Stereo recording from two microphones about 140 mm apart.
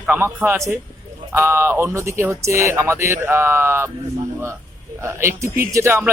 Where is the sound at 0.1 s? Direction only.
15° right (ahead or behind).